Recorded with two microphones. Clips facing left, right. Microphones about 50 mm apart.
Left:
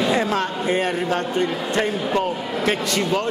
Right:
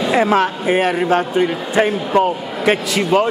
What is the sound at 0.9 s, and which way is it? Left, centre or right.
A man's voice, right.